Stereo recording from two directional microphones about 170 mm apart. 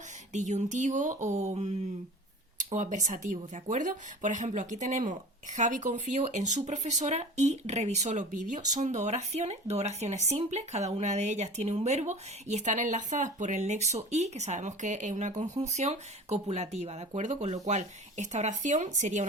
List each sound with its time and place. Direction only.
0.3 s speech: 45° right (ahead or behind)
2.7 s speech: 45° right (ahead or behind)